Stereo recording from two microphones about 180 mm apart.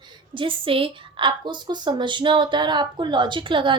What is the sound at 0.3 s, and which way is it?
A woman's voice, 30° right (ahead or behind).